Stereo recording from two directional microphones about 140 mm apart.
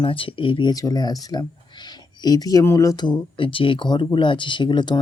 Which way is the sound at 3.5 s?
40° left (ahead or behind).